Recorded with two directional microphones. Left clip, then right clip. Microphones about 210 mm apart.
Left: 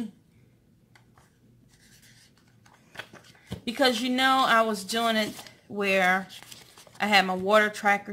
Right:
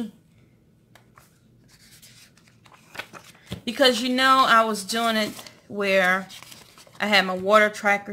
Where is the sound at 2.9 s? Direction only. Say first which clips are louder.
Right 5 dB; 15° right (ahead or behind).